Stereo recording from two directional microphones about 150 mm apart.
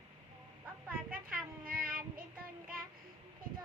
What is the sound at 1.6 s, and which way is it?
Child singing, 70° right (ahead or behind).